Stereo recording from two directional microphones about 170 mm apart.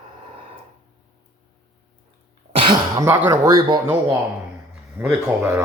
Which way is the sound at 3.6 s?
25° right (ahead or behind).